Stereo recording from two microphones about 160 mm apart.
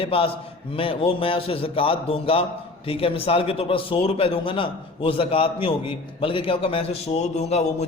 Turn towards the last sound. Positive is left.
turn(degrees=45)  # may be behind; listen again after turning